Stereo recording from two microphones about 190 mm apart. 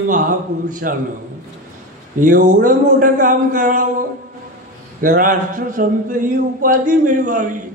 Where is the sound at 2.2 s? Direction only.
45° right (ahead or behind).